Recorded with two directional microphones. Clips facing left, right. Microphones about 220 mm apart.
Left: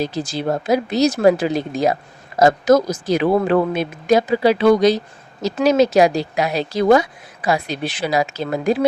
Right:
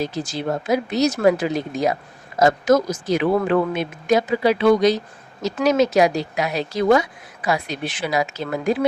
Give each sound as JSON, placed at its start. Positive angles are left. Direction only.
{"t": 0.0, "sound": "speech", "side_deg": 35}